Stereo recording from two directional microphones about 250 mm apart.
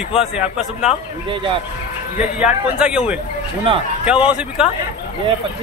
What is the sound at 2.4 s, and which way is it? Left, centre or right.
Speech, centre.